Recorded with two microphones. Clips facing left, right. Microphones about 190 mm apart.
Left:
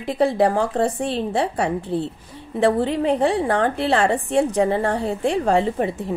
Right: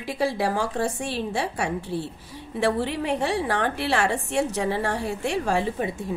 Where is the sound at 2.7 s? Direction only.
20° left (ahead or behind).